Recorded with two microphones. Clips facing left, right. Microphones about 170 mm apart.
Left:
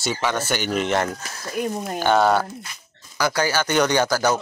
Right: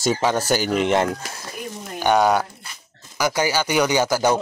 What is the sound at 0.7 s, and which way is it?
Speech, 15° right (ahead or behind).